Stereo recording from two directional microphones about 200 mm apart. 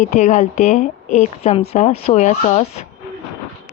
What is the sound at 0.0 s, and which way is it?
Speech, 35° left (ahead or behind).